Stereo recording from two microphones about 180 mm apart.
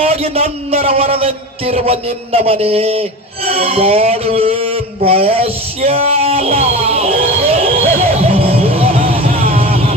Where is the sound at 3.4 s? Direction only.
35° right (ahead or behind).